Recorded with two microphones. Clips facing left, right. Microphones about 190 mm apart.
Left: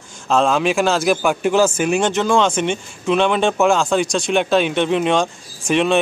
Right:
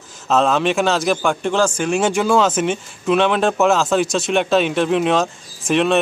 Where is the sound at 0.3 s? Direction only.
Centre (ahead or behind).